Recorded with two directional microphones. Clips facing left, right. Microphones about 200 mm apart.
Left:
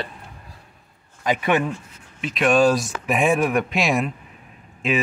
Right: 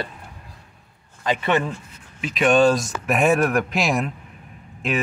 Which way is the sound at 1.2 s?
10° left (ahead or behind).